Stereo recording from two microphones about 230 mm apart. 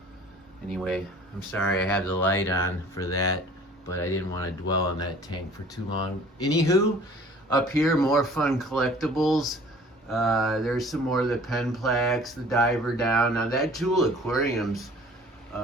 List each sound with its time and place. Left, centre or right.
0.7 s speech: centre
6.4 s speech: centre
7.8 s speech: centre